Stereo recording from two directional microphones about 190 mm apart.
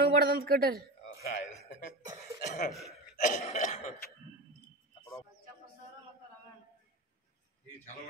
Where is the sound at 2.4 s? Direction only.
40° left (ahead or behind).